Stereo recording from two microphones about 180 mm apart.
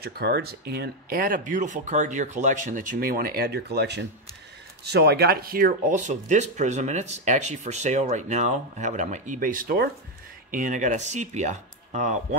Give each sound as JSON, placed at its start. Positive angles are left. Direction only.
{"t": 0.0, "sound": "speech", "side_deg": -65}